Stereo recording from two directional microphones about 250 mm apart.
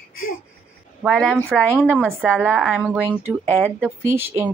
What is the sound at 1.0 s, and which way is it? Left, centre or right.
Speech, centre.